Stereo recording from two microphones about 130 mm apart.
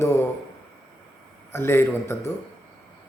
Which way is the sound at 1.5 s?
20° left (ahead or behind).